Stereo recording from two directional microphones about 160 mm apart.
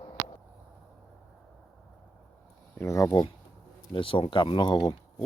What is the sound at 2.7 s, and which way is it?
Speech, 20° left (ahead or behind).